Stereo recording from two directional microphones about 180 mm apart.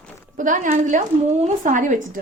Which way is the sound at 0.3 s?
45° right (ahead or behind).